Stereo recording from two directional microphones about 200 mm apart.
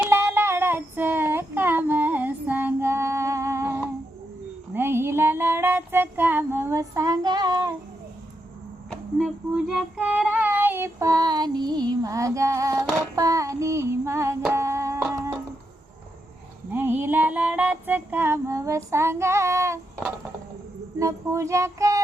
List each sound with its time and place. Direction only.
0.1 s child singing: 10° right (ahead or behind)
4.7 s a sound: 10° right (ahead or behind)
8.9 s child singing: centre (ahead or behind)
14.5 s music: 15° right (ahead or behind)
16.7 s music: 10° right (ahead or behind)
21.0 s child singing: 15° right (ahead or behind)